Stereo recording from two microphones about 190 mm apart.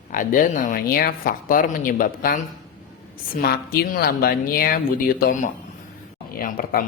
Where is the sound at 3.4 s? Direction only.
50° left (ahead or behind).